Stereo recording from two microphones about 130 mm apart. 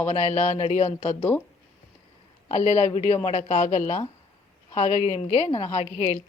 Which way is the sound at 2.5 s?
60° left (ahead or behind).